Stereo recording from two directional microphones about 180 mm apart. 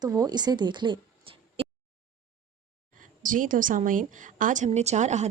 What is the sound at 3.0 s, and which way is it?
A woman's voice, 45° right (ahead or behind).